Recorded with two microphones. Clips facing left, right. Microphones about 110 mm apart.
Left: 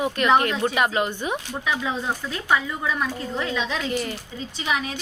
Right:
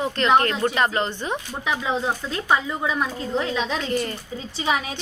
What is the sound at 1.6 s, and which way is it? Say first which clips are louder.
Speech: right 3 dB; 20° right (ahead or behind).